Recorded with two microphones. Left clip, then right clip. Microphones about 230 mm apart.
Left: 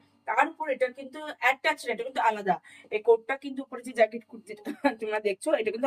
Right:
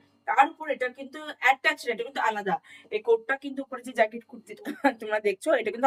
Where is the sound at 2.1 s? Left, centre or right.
Centre.